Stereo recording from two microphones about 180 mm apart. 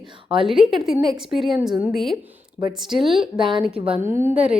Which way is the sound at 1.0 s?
20° right (ahead or behind).